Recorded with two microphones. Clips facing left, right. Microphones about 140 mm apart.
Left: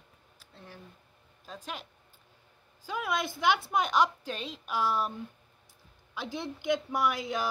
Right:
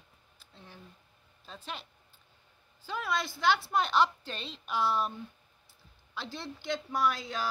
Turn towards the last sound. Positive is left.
turn(degrees=20)  # may be behind; listen again after turning